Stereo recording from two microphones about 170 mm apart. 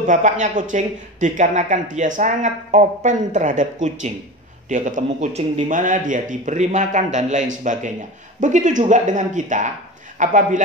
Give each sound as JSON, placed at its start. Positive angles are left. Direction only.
{"t": 0.0, "sound": "speech", "side_deg": -50}